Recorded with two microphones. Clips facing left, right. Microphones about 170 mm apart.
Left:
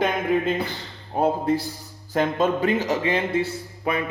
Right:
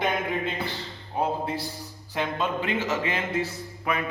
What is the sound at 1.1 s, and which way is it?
A man's voice, 45° left (ahead or behind).